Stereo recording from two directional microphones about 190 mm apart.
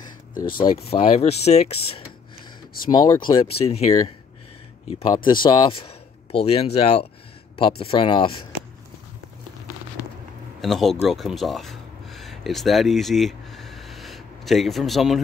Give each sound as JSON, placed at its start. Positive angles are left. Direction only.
{"t": 0.4, "sound": "speech", "side_deg": 25}
{"t": 4.8, "sound": "speech", "side_deg": 30}
{"t": 10.6, "sound": "speech", "side_deg": 0}